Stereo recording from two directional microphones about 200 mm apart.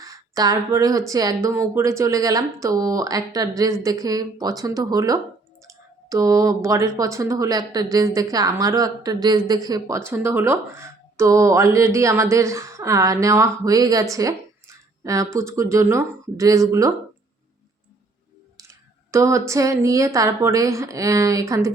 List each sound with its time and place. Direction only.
0.0 s speech: 15° right (ahead or behind)
18.5 s speech: 15° right (ahead or behind)